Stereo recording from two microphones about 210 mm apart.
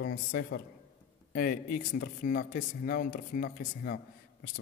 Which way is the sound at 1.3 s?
40° left (ahead or behind).